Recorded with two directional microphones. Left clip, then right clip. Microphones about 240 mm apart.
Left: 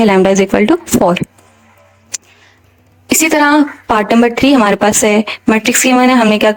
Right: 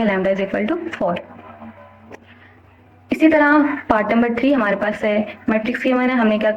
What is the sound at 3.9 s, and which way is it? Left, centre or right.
A woman's voice, left.